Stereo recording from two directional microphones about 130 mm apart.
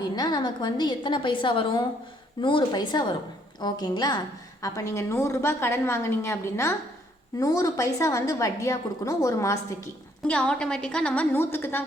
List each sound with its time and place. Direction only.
0.0 s a woman's voice: 35° left (ahead or behind)
10.2 s a woman's voice: 10° left (ahead or behind)